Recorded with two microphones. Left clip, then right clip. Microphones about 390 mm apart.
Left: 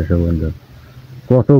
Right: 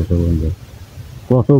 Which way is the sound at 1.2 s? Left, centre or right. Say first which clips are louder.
Left 2 dB; right.